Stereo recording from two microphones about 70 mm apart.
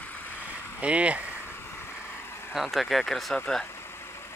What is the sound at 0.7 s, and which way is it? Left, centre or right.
Speech, centre.